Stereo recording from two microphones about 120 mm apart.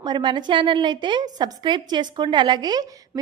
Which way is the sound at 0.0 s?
40° right (ahead or behind).